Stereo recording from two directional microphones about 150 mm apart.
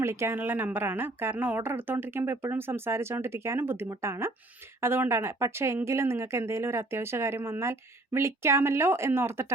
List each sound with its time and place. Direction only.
0.0 s speech: 15° right (ahead or behind)